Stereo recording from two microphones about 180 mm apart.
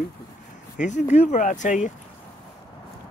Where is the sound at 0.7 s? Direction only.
40° left (ahead or behind).